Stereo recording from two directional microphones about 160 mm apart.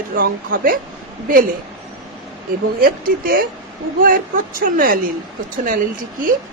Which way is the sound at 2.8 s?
65° right (ahead or behind).